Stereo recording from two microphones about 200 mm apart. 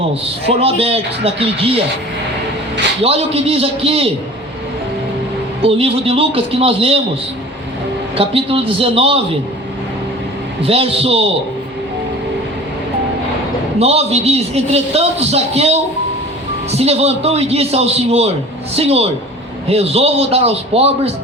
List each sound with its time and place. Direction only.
0.1 s speech: 30° right (ahead or behind)
3.0 s speech: 30° right (ahead or behind)
5.6 s speech: 30° right (ahead or behind)
8.1 s speech: 30° right (ahead or behind)
10.6 s speech: 30° right (ahead or behind)
13.7 s a man's voice: 30° right (ahead or behind)